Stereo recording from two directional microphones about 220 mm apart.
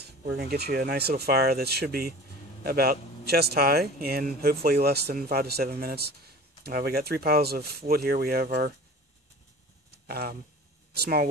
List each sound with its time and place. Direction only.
0.0 s speech: 45° right (ahead or behind)
10.0 s speech: 45° right (ahead or behind)